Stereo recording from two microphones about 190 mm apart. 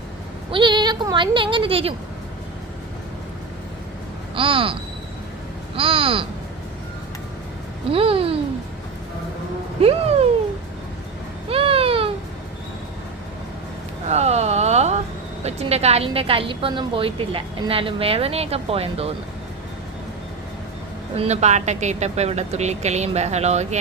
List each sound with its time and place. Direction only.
0.5 s a woman's voice: 25° right (ahead or behind)
4.4 s a woman's voice: 30° right (ahead or behind)
7.9 s a woman's voice: 30° right (ahead or behind)
11.4 s a sound: 30° right (ahead or behind)
14.1 s a sound: 35° right (ahead or behind)
15.4 s a woman's voice: 35° right (ahead or behind)
21.2 s speech: 35° right (ahead or behind)